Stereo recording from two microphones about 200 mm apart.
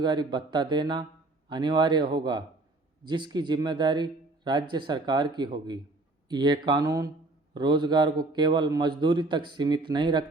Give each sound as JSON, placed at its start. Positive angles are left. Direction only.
{"t": 0.0, "sound": "speech", "side_deg": -20}